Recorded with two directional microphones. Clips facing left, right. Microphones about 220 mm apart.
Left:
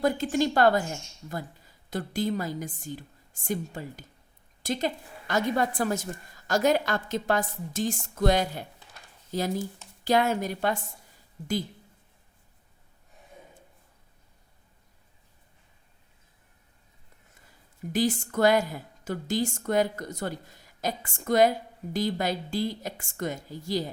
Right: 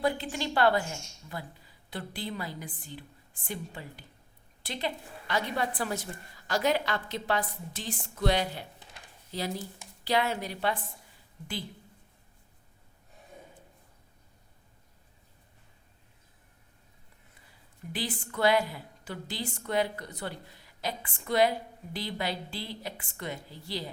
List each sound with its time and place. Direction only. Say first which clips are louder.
0.0 s a woman's voice: left 6 dB; 45° left (ahead or behind)
17.9 s a woman's voice: left 9 dB; 45° left (ahead or behind)